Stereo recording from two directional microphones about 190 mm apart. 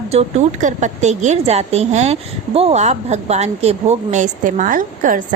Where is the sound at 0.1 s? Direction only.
35° right (ahead or behind).